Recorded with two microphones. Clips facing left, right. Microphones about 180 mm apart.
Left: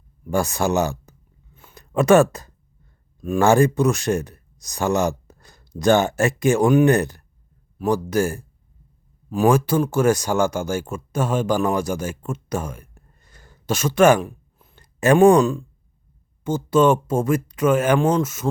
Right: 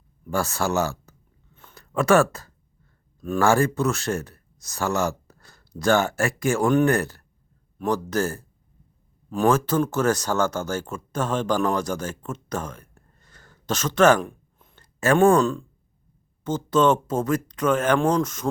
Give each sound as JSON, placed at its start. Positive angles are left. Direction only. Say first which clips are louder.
{"t": 0.3, "sound": "speech", "louder": "left 4 dB", "side_deg": 15}
{"t": 1.5, "sound": "a sound", "louder": "left 4 dB", "side_deg": 15}
{"t": 3.2, "sound": "speech", "louder": "left 4 dB", "side_deg": 15}
{"t": 14.8, "sound": "speech", "louder": "left 4 dB", "side_deg": 15}